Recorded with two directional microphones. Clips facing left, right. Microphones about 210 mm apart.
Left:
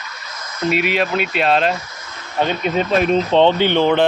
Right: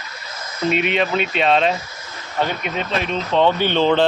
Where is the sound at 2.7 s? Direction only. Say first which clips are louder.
Left 7 dB; 35° left (ahead or behind).